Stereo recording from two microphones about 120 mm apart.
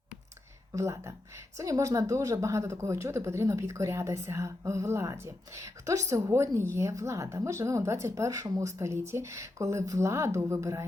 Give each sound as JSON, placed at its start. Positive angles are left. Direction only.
{"t": 0.7, "sound": "a woman's voice", "side_deg": -25}